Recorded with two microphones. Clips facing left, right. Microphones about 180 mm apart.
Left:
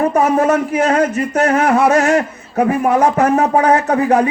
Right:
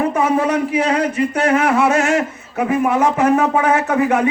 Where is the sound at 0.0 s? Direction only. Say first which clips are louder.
Left 3 dB; 40° left (ahead or behind).